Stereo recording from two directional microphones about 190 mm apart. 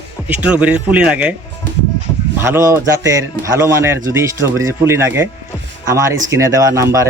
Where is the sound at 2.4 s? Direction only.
15° right (ahead or behind).